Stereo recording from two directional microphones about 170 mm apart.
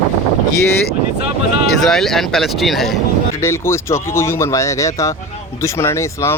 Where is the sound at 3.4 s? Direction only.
15° left (ahead or behind).